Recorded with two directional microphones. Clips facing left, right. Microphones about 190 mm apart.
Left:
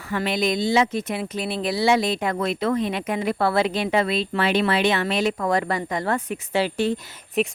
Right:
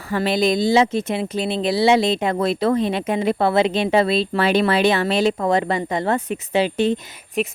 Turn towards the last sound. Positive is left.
turn(degrees=0)  # may be behind; listen again after turning